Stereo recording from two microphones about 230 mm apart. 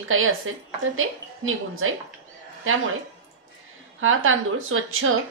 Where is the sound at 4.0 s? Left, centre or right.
Right.